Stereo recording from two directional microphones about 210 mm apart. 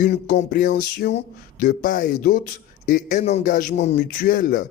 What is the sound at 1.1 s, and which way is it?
Speech, 40° left (ahead or behind).